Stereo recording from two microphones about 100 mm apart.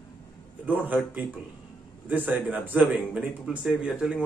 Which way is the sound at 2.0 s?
15° right (ahead or behind).